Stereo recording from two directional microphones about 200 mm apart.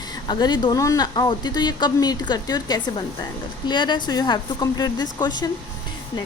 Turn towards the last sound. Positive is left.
turn(degrees=20)  # may be behind; listen again after turning